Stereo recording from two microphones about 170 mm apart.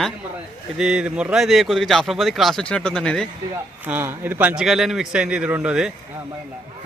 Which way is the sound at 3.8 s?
10° right (ahead or behind).